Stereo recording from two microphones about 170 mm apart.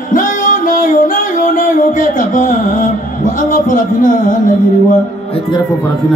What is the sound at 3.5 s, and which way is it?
Music, 50° left (ahead or behind).